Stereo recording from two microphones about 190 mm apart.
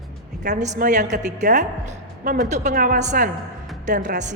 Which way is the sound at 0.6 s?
40° right (ahead or behind).